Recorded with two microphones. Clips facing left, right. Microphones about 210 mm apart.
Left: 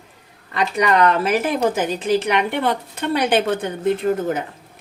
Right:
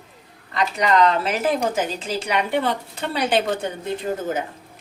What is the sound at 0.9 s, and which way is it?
A woman's voice, 60° left (ahead or behind).